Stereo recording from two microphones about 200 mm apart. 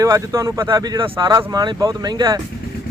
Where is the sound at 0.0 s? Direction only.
15° right (ahead or behind).